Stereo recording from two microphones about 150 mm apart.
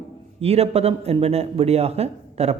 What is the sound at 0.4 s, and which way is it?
Speech, 45° right (ahead or behind).